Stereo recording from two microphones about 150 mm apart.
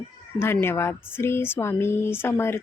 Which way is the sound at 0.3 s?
15° left (ahead or behind).